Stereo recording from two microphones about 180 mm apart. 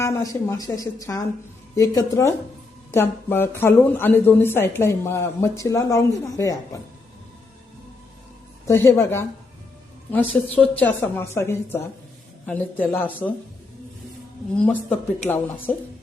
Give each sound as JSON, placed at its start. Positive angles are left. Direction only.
{"t": 0.0, "sound": "a woman's voice", "side_deg": 15}
{"t": 8.6, "sound": "speech", "side_deg": 15}
{"t": 14.5, "sound": "speech", "side_deg": 5}